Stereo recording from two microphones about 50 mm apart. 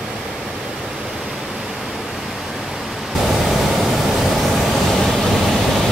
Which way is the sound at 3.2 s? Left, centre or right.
Centre.